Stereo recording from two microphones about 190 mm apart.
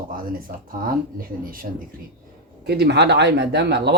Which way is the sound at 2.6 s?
60° right (ahead or behind).